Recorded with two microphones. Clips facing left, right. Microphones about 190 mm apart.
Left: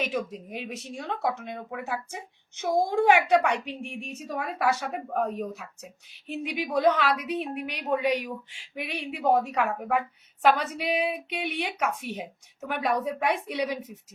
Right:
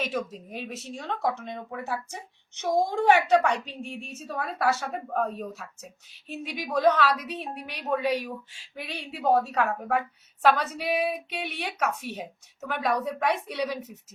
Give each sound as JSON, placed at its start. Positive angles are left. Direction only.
{"t": 0.0, "sound": "speech", "side_deg": 10}